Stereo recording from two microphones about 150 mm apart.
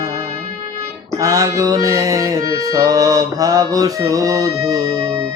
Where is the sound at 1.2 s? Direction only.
25° right (ahead or behind).